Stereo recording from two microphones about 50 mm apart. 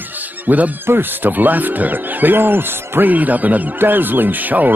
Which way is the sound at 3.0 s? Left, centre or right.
Right.